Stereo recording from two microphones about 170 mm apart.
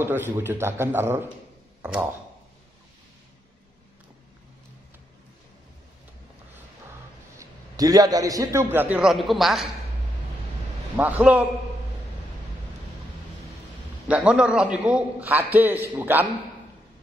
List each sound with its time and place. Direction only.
0.0 s a man's voice: 10° right (ahead or behind)
7.3 s a man's voice: 20° right (ahead or behind)
8.7 s speech: 10° right (ahead or behind)
11.0 s a man's voice: 10° right (ahead or behind)
14.0 s a man's voice: 5° right (ahead or behind)